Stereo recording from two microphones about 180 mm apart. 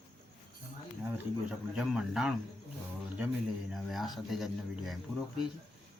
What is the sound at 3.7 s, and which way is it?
Speech, centre (ahead or behind).